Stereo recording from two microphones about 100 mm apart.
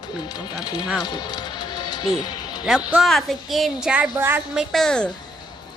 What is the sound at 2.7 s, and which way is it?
A woman's voice, 5° right (ahead or behind).